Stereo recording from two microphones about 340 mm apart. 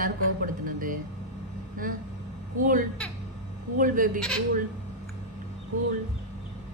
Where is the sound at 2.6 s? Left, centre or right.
Right.